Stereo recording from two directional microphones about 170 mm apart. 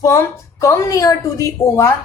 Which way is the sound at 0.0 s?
15° left (ahead or behind).